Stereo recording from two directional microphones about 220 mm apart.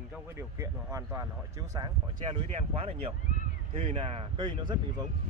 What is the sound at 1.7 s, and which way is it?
Speech, 20° right (ahead or behind).